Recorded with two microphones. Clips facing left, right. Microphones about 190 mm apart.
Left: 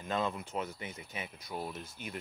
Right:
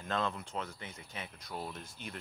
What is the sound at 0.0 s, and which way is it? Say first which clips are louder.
Speech: left 1 dB; 5° left (ahead or behind).